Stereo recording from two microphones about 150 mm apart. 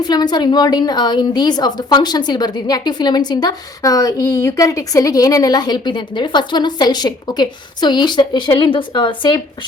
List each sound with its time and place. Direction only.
0.0 s a woman's voice: 25° left (ahead or behind)